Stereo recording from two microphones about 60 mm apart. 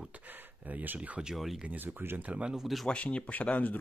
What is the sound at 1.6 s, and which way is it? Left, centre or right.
Speech, right.